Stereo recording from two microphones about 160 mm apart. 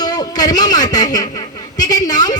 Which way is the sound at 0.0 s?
25° left (ahead or behind).